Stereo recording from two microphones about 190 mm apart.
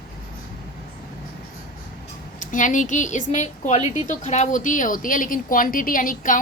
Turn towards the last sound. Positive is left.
turn(degrees=45)  # may be behind; listen again after turning